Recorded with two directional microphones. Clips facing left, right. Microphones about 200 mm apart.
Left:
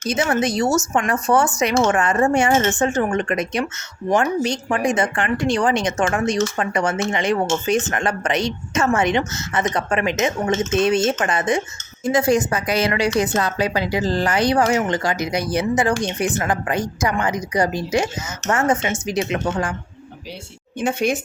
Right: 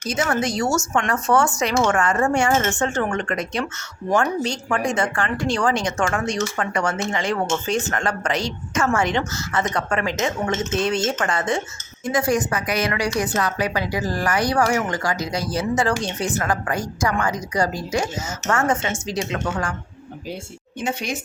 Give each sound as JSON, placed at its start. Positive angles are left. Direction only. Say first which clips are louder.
{"t": 0.1, "sound": "a woman's voice", "louder": "left 3 dB", "side_deg": 20}
{"t": 20.8, "sound": "speech", "louder": "left 6 dB", "side_deg": 55}